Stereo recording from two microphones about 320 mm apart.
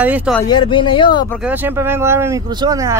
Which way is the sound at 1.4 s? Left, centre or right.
Centre.